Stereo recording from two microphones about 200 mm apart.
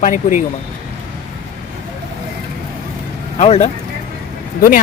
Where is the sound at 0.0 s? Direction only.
40° left (ahead or behind).